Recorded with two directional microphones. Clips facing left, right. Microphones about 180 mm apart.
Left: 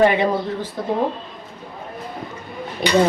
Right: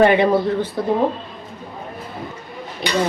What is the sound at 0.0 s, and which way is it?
Speech, 65° right (ahead or behind).